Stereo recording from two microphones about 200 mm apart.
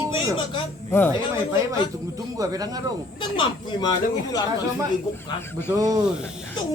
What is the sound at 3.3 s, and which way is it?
Speech, 25° left (ahead or behind).